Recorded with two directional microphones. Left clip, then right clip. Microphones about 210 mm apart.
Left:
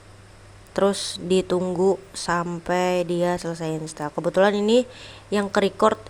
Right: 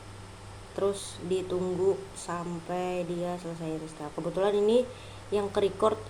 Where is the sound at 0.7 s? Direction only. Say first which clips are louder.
Left 9 dB; 45° left (ahead or behind).